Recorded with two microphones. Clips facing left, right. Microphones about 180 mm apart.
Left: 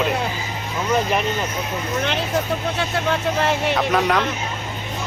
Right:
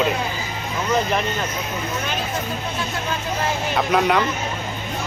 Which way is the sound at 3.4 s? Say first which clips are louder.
Left 4 dB; 65° left (ahead or behind).